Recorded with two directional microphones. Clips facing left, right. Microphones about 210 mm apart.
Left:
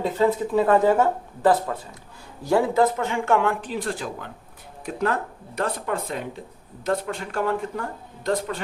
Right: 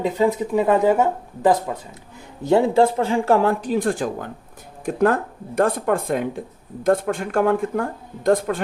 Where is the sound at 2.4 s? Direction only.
25° right (ahead or behind).